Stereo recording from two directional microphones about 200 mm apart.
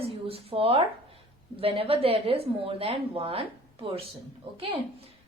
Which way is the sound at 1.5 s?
30° right (ahead or behind).